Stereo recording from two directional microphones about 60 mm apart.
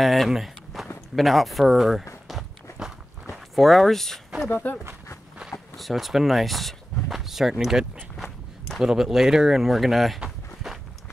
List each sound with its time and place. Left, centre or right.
0.0 s speech: centre
2.2 s walk: centre
4.5 s speech: left
5.8 s speech: centre
10.2 s walk: centre